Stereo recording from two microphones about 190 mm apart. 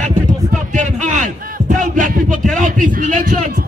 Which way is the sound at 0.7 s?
40° right (ahead or behind).